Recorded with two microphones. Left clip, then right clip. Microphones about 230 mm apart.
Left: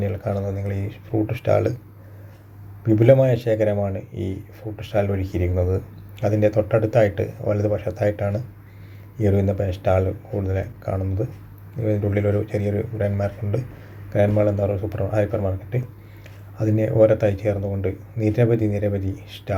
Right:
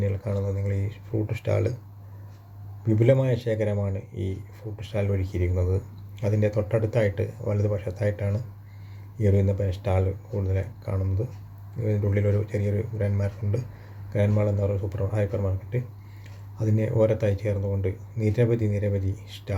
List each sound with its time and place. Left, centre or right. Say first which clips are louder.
0.0 s speech: left 4 dB; centre
2.8 s speech: left 7 dB; centre